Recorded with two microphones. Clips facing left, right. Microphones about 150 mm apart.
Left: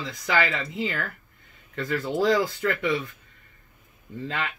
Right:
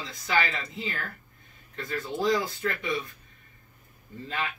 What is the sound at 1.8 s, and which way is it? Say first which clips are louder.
Speech: left 5 dB; 90° left.